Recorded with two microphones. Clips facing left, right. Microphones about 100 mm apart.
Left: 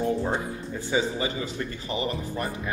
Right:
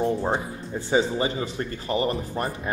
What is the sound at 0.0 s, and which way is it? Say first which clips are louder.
Speech: right 2 dB; 30° right (ahead or behind).